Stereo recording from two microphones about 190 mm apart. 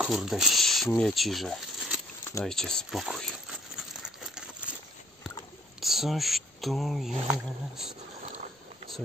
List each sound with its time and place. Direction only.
0.0 s speech: centre (ahead or behind)
2.4 s a sound: 5° left (ahead or behind)
5.8 s speech: centre (ahead or behind)